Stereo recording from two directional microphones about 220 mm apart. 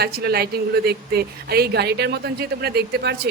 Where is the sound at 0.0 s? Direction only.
45° right (ahead or behind).